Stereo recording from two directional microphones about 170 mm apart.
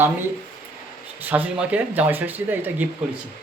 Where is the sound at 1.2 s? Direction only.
10° right (ahead or behind).